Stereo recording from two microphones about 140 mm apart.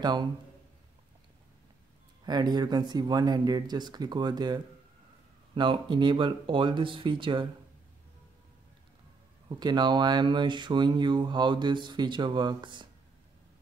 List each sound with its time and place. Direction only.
0.0 s speech: 30° right (ahead or behind)
2.2 s speech: 30° right (ahead or behind)
9.6 s speech: 30° right (ahead or behind)